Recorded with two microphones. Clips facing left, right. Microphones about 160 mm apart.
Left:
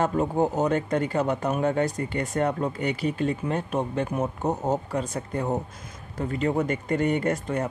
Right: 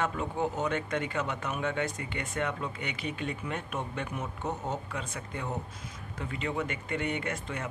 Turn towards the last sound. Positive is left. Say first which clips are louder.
# left 9 dB
turn(degrees=40)  # may be behind; listen again after turning